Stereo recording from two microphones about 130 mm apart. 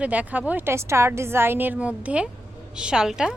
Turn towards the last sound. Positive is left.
turn(degrees=-5)  # may be behind; listen again after turning